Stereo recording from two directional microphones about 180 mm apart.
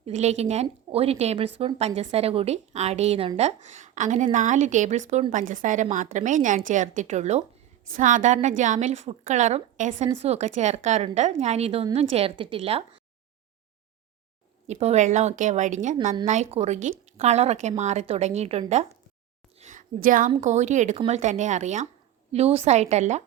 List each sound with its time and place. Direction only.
0.0 s a woman's voice: 40° right (ahead or behind)
14.7 s a woman's voice: 40° right (ahead or behind)